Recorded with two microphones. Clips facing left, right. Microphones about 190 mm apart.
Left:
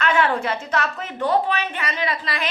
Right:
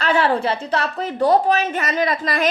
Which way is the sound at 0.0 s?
35° right (ahead or behind).